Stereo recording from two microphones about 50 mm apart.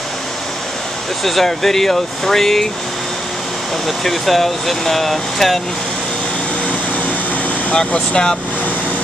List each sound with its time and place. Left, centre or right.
1.2 s speech: centre
3.8 s speech: centre
7.7 s speech: left